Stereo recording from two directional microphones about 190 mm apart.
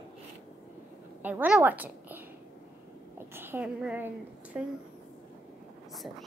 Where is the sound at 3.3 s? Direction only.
10° right (ahead or behind).